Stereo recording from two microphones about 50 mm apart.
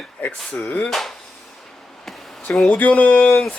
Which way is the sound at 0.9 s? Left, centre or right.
Centre.